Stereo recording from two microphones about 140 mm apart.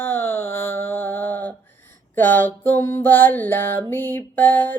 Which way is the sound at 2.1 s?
15° left (ahead or behind).